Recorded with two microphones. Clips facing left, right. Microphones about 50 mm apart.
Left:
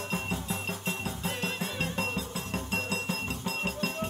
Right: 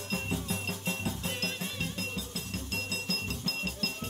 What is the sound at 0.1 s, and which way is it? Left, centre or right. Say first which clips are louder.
Music: right 1 dB; centre.